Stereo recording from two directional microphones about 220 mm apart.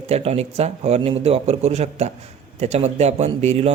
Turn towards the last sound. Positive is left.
turn(degrees=-30)  # may be behind; listen again after turning